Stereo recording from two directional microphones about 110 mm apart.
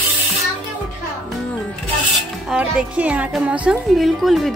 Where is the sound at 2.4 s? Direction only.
10° right (ahead or behind).